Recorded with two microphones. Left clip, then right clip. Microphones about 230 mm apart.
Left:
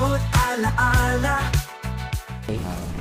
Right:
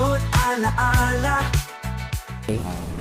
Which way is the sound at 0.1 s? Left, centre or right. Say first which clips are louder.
Right 1 dB; centre.